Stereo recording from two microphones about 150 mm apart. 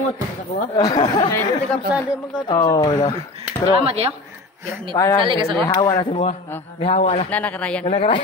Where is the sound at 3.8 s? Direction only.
40° right (ahead or behind).